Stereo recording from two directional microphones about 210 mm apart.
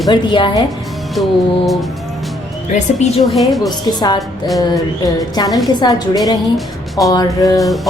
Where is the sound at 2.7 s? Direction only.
35° left (ahead or behind).